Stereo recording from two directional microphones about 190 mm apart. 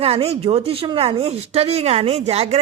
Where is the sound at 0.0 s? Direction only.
30° right (ahead or behind).